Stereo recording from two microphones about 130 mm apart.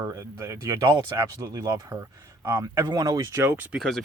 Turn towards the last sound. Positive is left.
turn(degrees=5)  # may be behind; listen again after turning